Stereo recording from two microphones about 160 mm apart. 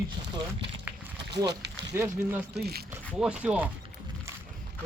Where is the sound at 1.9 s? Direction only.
15° right (ahead or behind).